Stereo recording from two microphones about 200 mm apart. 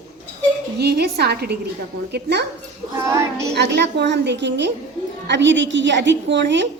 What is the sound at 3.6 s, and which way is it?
A woman's voice, 60° right (ahead or behind).